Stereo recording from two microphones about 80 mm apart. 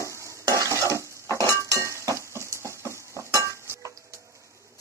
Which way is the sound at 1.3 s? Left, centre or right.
Left.